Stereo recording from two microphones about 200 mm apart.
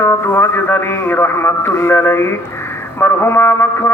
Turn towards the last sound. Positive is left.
turn(degrees=10)  # may be behind; listen again after turning